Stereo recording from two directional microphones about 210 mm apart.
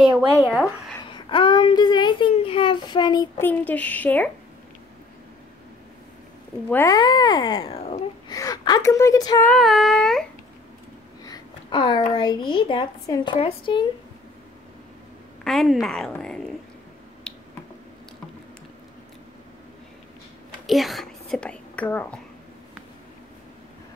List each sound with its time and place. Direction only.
0.5 s a woman's voice: centre (ahead or behind)
1.0 s a child's voice: 25° left (ahead or behind); by 4.3 s 10° left (ahead or behind)
6.7 s a child's voice: 15° left (ahead or behind)
8.3 s a woman's voice: 15° left (ahead or behind)
9.5 s a woman's voice: centre (ahead or behind)
11.2 s a child's voice: 20° left (ahead or behind)
15.4 s a woman's voice: centre (ahead or behind)
17.3 s finger snapping: 5° left (ahead or behind)
20.6 s speech: centre (ahead or behind)